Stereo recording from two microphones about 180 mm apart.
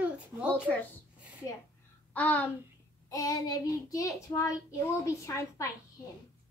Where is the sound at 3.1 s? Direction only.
20° left (ahead or behind).